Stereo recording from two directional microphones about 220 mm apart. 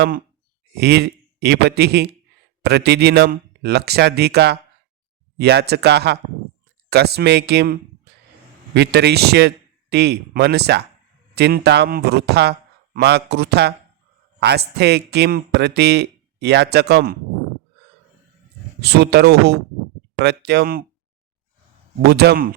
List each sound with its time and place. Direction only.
0.8 s speech: 50° right (ahead or behind)
18.8 s speech: 50° right (ahead or behind)
22.0 s speech: 45° right (ahead or behind)